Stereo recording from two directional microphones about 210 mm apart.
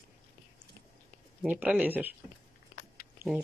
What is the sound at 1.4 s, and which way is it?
Speech, 5° right (ahead or behind).